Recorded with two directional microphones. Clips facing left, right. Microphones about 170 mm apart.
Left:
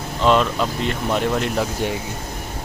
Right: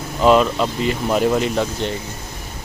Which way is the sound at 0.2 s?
5° right (ahead or behind).